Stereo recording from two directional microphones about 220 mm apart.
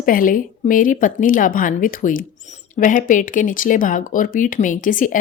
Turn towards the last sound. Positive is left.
turn(degrees=35)  # may be behind; listen again after turning